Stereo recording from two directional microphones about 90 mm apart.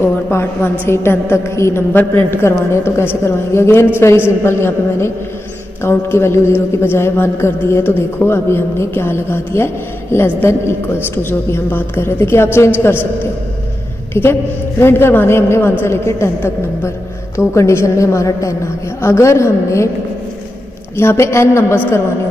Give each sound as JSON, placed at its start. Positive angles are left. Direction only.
{"t": 0.0, "sound": "a woman's voice", "side_deg": 30}
{"t": 14.2, "sound": "a woman's voice", "side_deg": 30}
{"t": 20.9, "sound": "a woman's voice", "side_deg": 30}